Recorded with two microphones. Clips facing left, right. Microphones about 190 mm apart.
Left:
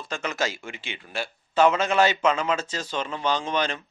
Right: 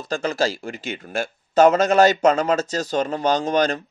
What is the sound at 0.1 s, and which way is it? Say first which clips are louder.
Speech: right 7 dB; 35° right (ahead or behind).